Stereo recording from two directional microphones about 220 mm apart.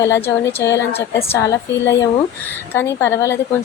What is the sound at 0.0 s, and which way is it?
Speech, 15° left (ahead or behind).